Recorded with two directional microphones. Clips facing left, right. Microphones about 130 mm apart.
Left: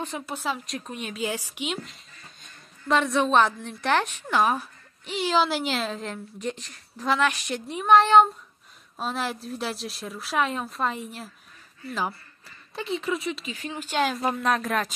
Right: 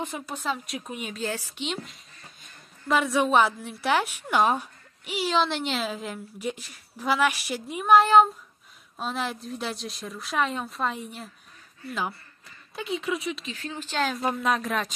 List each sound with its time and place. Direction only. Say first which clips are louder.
0.3 s a woman's voice: left 1 dB; 5° left (ahead or behind)
1.1 s a woman's voice: left 3 dB; 10° left (ahead or behind)
2.9 s a woman's voice: left 1 dB; 5° right (ahead or behind)
4.4 s speech: even; 20° right (ahead or behind)
5.0 s a woman's voice: left 1 dB; 5° right (ahead or behind)
13.5 s a woman's voice: left 2 dB; 10° left (ahead or behind)
14.1 s a woman's voice: left 1 dB; centre (ahead or behind)